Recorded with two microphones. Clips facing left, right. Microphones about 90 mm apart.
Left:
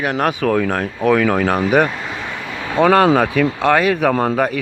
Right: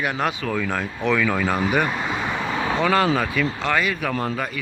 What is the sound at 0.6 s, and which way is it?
Speech, 45° left (ahead or behind).